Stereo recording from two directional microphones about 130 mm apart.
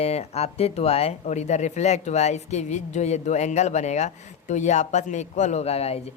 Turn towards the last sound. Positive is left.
turn(degrees=50)  # may be behind; listen again after turning